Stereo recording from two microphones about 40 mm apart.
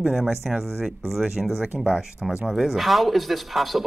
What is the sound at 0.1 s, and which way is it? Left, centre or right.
Speech, centre.